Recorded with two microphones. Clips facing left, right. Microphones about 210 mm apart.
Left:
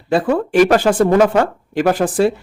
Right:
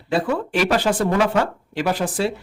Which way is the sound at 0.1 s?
50° left (ahead or behind).